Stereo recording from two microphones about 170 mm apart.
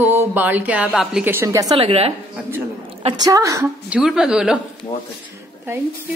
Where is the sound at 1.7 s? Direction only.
35° right (ahead or behind).